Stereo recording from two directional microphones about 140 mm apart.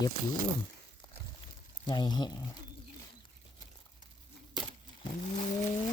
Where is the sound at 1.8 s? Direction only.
30° left (ahead or behind).